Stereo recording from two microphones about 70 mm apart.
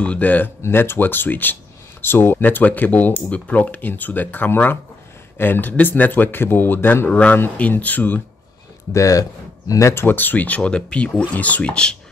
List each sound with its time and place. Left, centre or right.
0.0 s speech: left
0.6 s speech: left
7.1 s speech: centre
8.9 s speech: left
10.0 s speech: left